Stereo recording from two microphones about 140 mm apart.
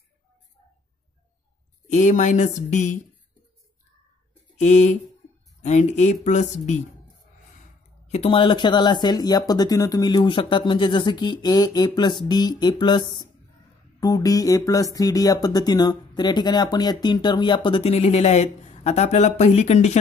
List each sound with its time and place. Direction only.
1.9 s speech: 60° left (ahead or behind)
4.6 s speech: 60° left (ahead or behind)
8.1 s speech: 40° left (ahead or behind)